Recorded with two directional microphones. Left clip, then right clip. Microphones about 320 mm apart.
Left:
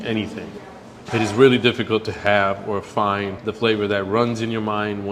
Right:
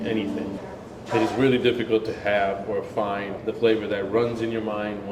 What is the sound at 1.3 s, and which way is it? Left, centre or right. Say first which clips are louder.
Speech: left 10 dB; left.